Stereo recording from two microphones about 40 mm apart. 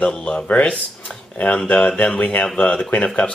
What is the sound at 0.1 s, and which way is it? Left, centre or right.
Speech, left.